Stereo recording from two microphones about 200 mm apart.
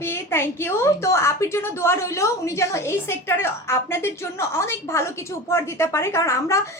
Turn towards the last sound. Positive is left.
turn(degrees=15)  # may be behind; listen again after turning